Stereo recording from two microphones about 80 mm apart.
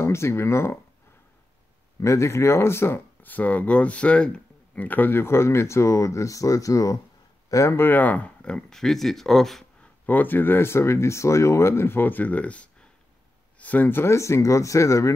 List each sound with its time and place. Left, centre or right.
0.0 s speech: left
2.0 s speech: left; by 9.8 s centre
10.0 s speech: left